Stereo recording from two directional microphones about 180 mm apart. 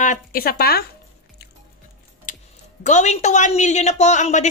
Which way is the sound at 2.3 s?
45° left (ahead or behind).